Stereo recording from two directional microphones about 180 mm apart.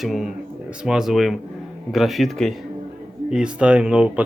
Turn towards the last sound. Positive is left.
turn(degrees=-5)  # may be behind; listen again after turning